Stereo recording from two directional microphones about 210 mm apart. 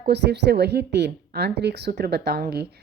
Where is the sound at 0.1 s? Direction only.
55° right (ahead or behind).